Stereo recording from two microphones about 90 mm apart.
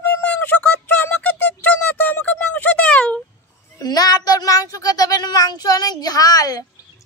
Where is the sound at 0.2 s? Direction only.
15° left (ahead or behind).